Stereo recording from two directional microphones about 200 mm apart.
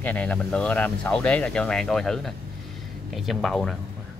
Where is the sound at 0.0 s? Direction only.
5° left (ahead or behind).